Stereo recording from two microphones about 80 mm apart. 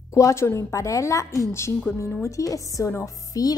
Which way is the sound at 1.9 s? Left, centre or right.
Left.